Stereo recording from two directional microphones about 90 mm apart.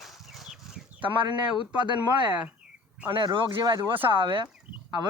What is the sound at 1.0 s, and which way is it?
Speech, 65° right (ahead or behind).